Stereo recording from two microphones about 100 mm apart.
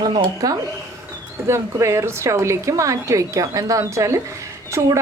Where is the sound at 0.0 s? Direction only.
45° right (ahead or behind).